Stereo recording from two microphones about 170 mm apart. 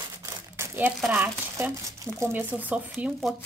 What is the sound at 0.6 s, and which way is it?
Speech, 10° right (ahead or behind).